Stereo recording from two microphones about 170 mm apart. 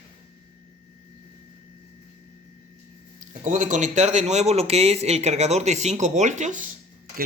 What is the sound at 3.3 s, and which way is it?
Speech, 50° right (ahead or behind).